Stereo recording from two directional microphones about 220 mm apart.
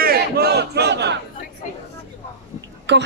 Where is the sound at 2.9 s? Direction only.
50° right (ahead or behind).